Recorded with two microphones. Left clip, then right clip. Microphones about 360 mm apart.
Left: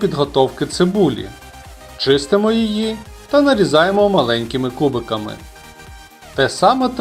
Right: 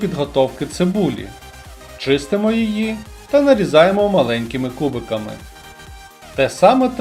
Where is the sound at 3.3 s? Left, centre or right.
Centre.